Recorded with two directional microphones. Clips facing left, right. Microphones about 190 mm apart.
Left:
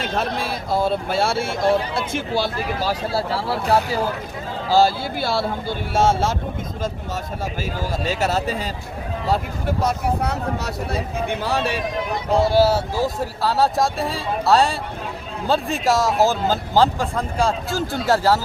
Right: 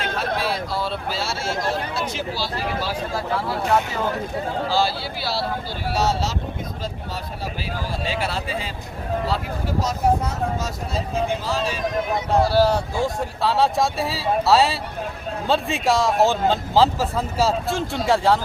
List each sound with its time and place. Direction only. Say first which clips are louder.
0.3 s speech: left 2 dB; 50° left (ahead or behind)
3.1 s speech: left 2 dB; 35° left (ahead or behind)
4.7 s speech: left 9 dB; 45° left (ahead or behind)
7.8 s speech: left 3 dB; 45° left (ahead or behind); by 11.8 s 65° left (ahead or behind)
12.5 s speech: left 2 dB; 5° left (ahead or behind)